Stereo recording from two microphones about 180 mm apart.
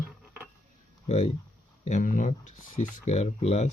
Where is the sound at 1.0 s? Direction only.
40° left (ahead or behind).